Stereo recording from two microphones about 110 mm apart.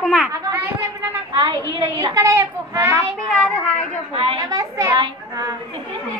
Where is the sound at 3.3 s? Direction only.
10° left (ahead or behind).